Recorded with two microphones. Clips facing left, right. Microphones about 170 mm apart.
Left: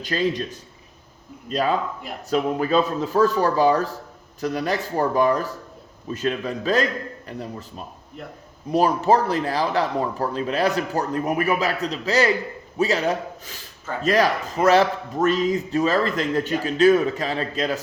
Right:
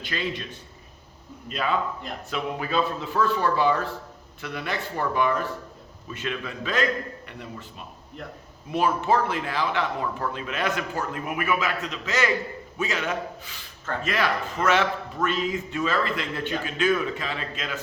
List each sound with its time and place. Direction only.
0.0 s a man's voice: 40° left (ahead or behind)